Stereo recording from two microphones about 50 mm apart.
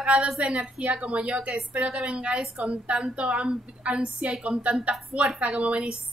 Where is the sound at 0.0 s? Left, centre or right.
Right.